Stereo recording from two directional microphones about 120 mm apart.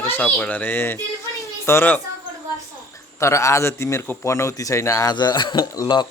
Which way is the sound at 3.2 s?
25° left (ahead or behind).